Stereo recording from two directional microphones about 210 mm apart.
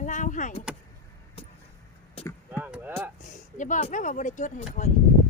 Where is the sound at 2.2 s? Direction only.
25° left (ahead or behind).